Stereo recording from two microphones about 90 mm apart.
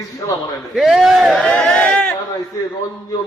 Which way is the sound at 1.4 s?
10° left (ahead or behind).